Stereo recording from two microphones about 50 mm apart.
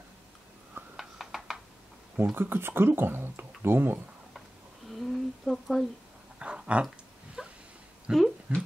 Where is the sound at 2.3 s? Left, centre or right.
Right.